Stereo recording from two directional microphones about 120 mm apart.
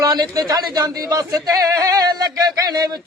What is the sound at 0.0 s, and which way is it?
A man's voice, 30° right (ahead or behind).